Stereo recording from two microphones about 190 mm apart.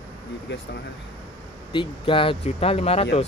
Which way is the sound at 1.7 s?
25° left (ahead or behind).